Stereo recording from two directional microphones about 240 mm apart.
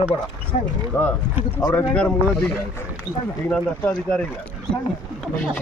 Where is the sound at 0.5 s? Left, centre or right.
Left.